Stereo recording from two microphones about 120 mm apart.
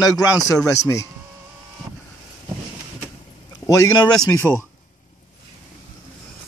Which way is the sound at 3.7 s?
30° left (ahead or behind).